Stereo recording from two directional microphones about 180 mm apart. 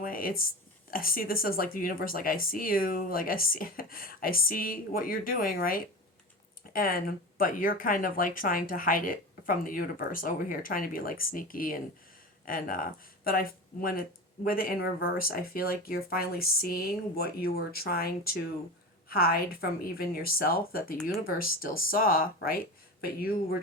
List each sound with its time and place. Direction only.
0.0 s speech: 50° left (ahead or behind)